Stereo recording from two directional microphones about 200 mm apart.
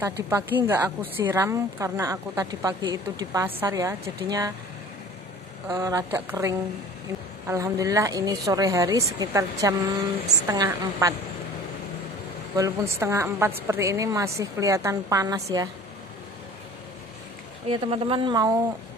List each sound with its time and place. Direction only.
0.3 s a woman's voice: 10° right (ahead or behind)
5.7 s a woman's voice: 15° right (ahead or behind)
12.5 s a woman's voice: 15° right (ahead or behind)
17.6 s speech: 25° right (ahead or behind)